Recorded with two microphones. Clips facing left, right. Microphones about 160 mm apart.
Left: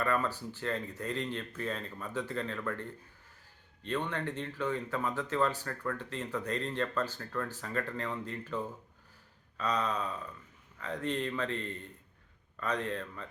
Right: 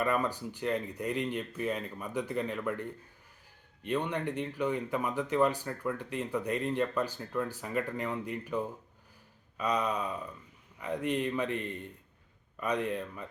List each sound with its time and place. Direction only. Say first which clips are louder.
0.0 s speech: right 2 dB; 15° right (ahead or behind)